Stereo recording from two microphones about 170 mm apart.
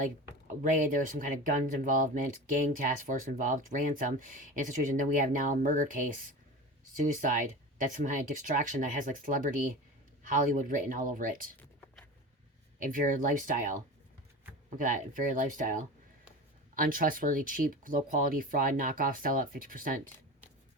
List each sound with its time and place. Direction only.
0.6 s speech: 50° right (ahead or behind)
12.8 s speech: 55° right (ahead or behind)